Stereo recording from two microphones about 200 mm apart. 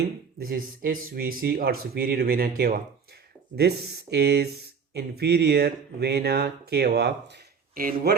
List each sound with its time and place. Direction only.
0.3 s speech: 45° right (ahead or behind)
4.1 s speech: 55° right (ahead or behind)